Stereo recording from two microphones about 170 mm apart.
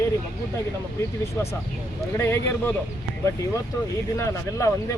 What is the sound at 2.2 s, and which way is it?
Speech, 15° left (ahead or behind).